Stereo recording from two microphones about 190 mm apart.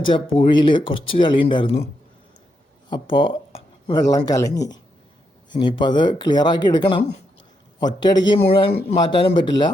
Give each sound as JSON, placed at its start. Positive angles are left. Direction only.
{"t": 0.1, "sound": "a man's voice", "side_deg": 25}
{"t": 2.9, "sound": "a man's voice", "side_deg": 25}